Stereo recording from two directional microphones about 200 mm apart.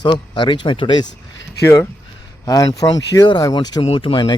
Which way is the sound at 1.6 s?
15° left (ahead or behind).